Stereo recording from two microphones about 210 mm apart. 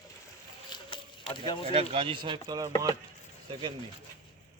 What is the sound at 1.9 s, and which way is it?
Speech, 25° right (ahead or behind).